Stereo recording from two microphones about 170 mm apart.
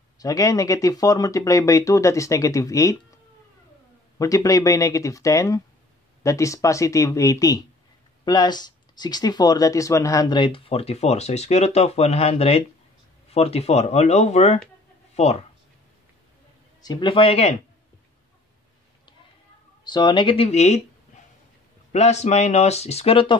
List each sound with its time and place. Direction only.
0.2 s speech: 20° left (ahead or behind)
4.2 s speech: 20° left (ahead or behind); by 15.3 s 40° left (ahead or behind)
16.8 s speech: 25° left (ahead or behind)
19.8 s speech: 25° left (ahead or behind)
21.9 s speech: 40° left (ahead or behind)